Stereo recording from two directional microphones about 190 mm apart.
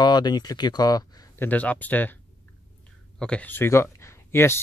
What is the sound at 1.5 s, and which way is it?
Speech, 10° left (ahead or behind).